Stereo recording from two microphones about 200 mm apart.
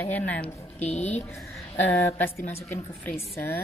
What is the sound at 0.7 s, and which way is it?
Speech, 35° left (ahead or behind).